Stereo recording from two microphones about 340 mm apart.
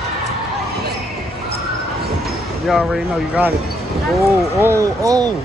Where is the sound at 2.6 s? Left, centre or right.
Centre.